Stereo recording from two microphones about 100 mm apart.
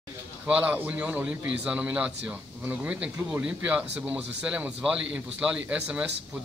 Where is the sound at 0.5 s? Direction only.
15° right (ahead or behind).